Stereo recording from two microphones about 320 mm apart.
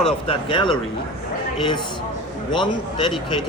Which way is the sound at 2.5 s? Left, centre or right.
Centre.